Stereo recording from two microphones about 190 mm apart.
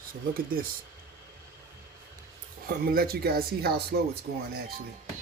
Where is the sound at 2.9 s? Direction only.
55° right (ahead or behind).